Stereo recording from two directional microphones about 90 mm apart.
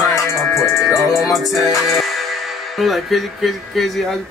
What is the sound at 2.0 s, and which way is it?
Speech, centre (ahead or behind).